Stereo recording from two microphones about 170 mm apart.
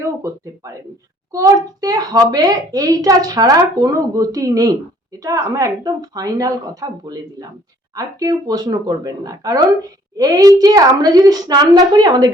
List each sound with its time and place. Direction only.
0.0 s a child's voice: 15° right (ahead or behind)